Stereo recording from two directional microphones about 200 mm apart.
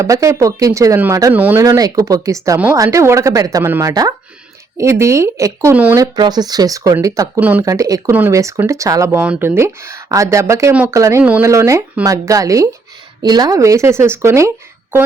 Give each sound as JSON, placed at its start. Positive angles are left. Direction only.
{"t": 0.0, "sound": "speech", "side_deg": -15}